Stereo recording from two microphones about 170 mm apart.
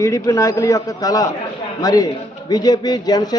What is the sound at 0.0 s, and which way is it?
A man's voice, 20° left (ahead or behind).